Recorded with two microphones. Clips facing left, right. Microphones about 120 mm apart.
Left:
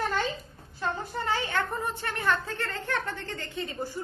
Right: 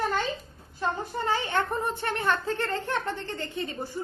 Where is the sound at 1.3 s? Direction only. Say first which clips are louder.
Right 2 dB; 25° right (ahead or behind).